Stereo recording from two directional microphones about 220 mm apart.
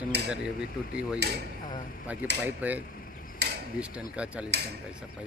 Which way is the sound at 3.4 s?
50° right (ahead or behind).